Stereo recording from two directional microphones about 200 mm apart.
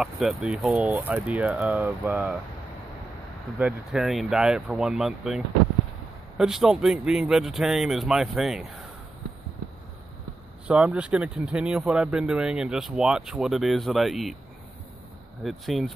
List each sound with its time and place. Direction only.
0.0 s speech: centre (ahead or behind)
3.5 s speech: 5° right (ahead or behind)
10.7 s speech: 5° right (ahead or behind)
15.4 s speech: centre (ahead or behind)